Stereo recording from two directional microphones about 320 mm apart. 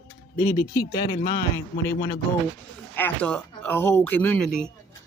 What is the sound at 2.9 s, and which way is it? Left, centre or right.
Speech, centre.